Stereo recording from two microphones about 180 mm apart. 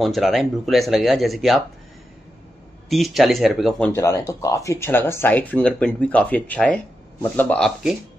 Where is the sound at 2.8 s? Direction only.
Centre (ahead or behind).